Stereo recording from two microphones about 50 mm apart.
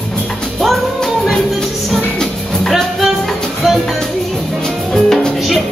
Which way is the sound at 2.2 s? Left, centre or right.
Centre.